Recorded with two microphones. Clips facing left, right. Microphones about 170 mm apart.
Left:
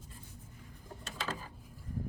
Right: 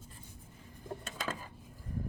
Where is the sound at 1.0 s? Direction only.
50° right (ahead or behind).